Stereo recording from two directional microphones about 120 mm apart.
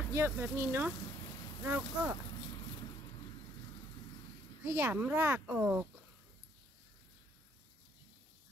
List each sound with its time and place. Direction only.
0.1 s speech: 20° right (ahead or behind)
4.6 s speech: 20° right (ahead or behind)